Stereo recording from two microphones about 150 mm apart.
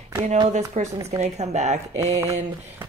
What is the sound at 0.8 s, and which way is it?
Speech, 50° right (ahead or behind).